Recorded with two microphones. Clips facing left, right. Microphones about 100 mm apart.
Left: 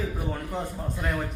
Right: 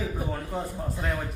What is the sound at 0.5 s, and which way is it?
Speech, 10° right (ahead or behind).